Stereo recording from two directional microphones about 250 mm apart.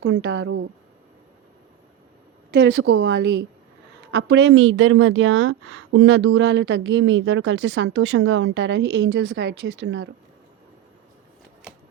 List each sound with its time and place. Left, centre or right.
0.0 s a woman's voice: right
2.5 s a woman's voice: right